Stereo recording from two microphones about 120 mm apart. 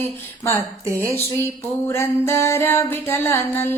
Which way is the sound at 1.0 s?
20° left (ahead or behind).